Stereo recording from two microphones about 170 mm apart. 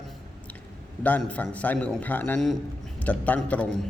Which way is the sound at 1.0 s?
10° left (ahead or behind).